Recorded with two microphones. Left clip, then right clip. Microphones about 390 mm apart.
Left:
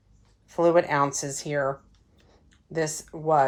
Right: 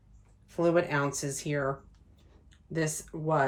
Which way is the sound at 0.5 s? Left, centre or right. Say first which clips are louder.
Left 6 dB; centre.